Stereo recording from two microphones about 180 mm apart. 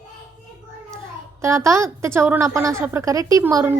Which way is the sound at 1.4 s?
15° right (ahead or behind).